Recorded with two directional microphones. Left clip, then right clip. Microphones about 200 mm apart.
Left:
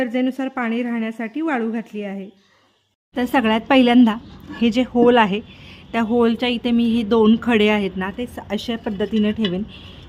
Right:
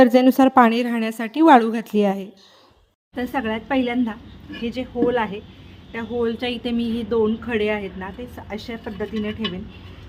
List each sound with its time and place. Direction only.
0.0 s a woman's voice: 25° right (ahead or behind)
3.2 s a woman's voice: 35° left (ahead or behind)